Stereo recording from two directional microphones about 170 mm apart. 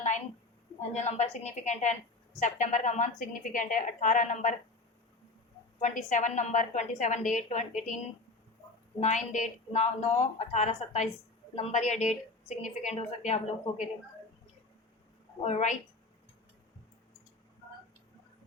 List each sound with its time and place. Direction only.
0.9 s a woman's voice: 40° left (ahead or behind)
5.8 s a woman's voice: 45° left (ahead or behind)
15.4 s a woman's voice: 40° left (ahead or behind)